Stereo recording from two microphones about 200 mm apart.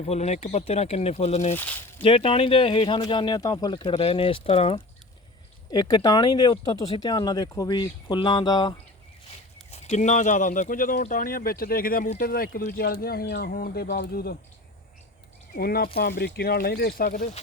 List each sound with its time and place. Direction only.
0.0 s speech: 35° left (ahead or behind)
1.5 s speech: 10° left (ahead or behind)
2.0 s speech: 25° left (ahead or behind)
9.7 s speech: 35° left (ahead or behind); by 14.3 s 50° left (ahead or behind)
15.5 s speech: 50° left (ahead or behind)